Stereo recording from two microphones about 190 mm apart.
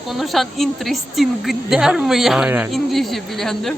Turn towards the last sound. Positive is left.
turn(degrees=0)  # may be behind; listen again after turning